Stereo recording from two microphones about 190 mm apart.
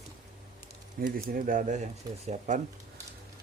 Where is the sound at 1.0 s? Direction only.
50° right (ahead or behind).